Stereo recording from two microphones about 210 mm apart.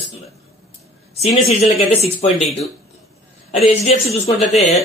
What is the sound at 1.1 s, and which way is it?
Speech, 30° left (ahead or behind).